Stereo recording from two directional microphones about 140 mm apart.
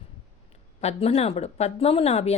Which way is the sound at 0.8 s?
50° left (ahead or behind).